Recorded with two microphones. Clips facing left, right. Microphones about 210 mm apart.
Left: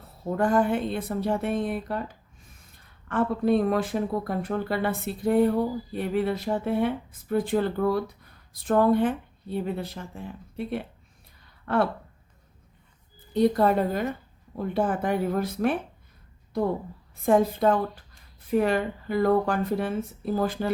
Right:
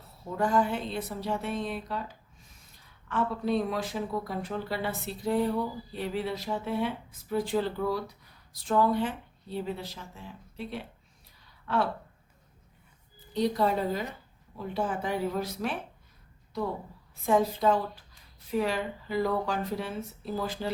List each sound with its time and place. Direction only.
0.3 s speech: 55° left (ahead or behind)
13.3 s speech: 55° left (ahead or behind)
17.2 s speech: 55° left (ahead or behind)